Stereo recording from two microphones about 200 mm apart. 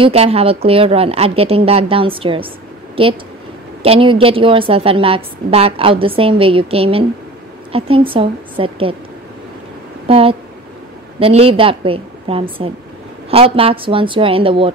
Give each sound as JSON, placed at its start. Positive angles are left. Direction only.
{"t": 0.0, "sound": "a woman's voice", "side_deg": -30}
{"t": 10.0, "sound": "a woman's voice", "side_deg": -30}